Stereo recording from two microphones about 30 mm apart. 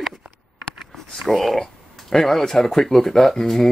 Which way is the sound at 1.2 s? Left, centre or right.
Centre.